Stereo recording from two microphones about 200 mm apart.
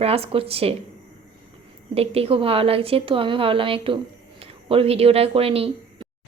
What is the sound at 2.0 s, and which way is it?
A woman's voice, 30° right (ahead or behind).